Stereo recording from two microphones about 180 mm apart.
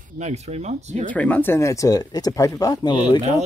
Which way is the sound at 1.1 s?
10° left (ahead or behind).